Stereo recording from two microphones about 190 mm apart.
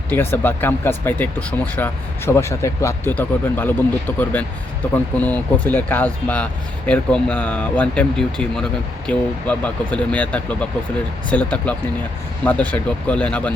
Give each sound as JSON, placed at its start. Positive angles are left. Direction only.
{"t": 0.1, "sound": "speech", "side_deg": 10}